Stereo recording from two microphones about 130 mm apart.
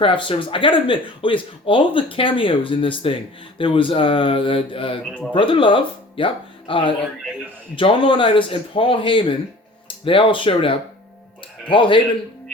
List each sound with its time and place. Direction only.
0.0 s speech: 40° left (ahead or behind)